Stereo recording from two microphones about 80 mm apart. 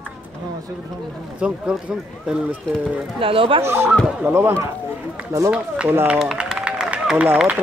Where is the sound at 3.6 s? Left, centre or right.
Right.